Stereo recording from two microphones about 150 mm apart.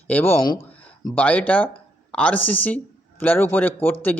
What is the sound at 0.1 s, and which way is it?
Speech, 10° left (ahead or behind).